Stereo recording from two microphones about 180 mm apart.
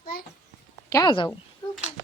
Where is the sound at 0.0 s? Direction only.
50° left (ahead or behind).